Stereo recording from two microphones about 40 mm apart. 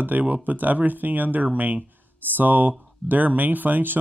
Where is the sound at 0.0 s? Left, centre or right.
Right.